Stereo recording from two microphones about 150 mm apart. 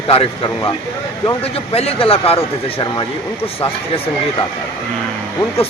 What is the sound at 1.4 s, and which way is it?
Speech, 40° left (ahead or behind).